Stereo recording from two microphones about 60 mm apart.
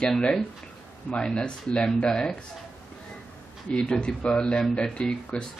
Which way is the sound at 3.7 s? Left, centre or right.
Centre.